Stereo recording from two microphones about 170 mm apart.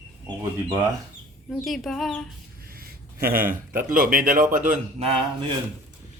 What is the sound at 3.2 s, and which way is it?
A man's voice, 55° right (ahead or behind).